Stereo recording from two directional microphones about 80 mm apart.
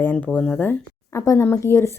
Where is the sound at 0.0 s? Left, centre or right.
Left.